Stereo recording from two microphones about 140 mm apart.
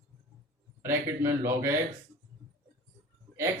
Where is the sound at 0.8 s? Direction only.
15° right (ahead or behind).